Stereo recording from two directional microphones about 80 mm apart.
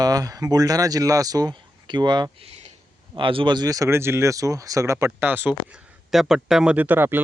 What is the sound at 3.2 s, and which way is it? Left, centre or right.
Speech, right.